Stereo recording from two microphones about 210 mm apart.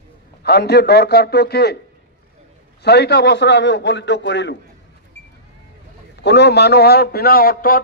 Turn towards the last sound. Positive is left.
turn(degrees=45)  # may be behind; listen again after turning